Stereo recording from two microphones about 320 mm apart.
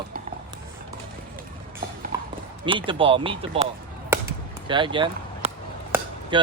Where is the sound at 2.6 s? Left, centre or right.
Centre.